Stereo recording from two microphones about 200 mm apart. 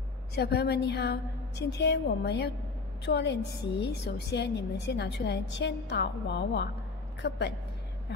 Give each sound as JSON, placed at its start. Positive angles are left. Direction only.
{"t": 0.3, "sound": "a woman's voice", "side_deg": 55}